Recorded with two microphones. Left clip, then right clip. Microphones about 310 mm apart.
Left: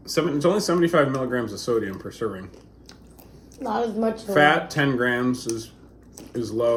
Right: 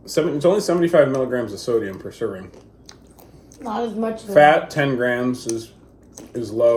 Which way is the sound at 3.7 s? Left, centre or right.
Left.